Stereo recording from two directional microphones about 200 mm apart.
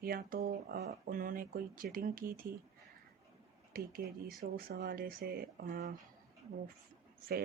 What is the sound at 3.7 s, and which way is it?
Speech, 45° right (ahead or behind).